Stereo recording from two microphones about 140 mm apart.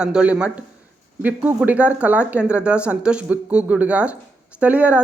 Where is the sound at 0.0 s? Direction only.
5° right (ahead or behind).